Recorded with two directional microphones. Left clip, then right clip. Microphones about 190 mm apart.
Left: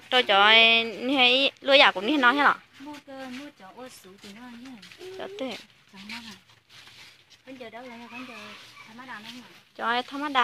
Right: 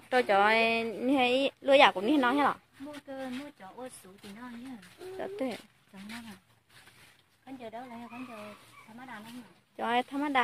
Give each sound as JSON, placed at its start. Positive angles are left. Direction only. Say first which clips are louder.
{"t": 0.1, "sound": "speech", "louder": "left 6 dB", "side_deg": -10}
{"t": 5.1, "sound": "speech", "louder": "left 1 dB", "side_deg": -15}
{"t": 9.8, "sound": "speech", "louder": "left 3 dB", "side_deg": -20}